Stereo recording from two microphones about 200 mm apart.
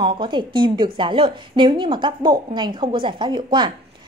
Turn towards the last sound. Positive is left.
turn(degrees=-20)  # may be behind; listen again after turning